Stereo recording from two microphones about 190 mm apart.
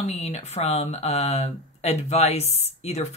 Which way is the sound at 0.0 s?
35° left (ahead or behind).